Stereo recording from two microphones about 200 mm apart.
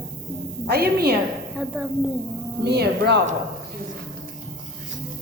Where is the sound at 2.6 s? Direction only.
55° right (ahead or behind).